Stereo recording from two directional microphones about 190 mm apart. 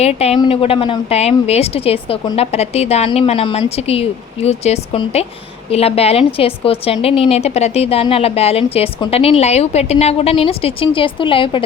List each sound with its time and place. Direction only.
0.0 s a woman's voice: 35° left (ahead or behind)